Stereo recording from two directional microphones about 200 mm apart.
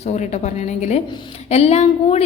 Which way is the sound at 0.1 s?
35° left (ahead or behind).